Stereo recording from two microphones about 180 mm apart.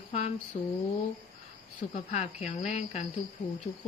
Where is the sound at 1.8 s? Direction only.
40° left (ahead or behind).